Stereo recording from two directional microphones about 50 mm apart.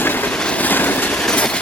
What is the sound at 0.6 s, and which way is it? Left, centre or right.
Vehicle, left.